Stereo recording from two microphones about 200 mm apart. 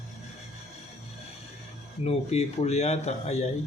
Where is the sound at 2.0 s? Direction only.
35° left (ahead or behind).